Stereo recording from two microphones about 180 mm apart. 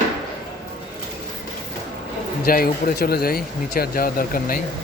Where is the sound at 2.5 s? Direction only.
55° left (ahead or behind).